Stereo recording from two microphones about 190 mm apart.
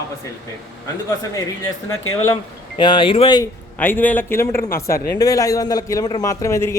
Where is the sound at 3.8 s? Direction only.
10° left (ahead or behind).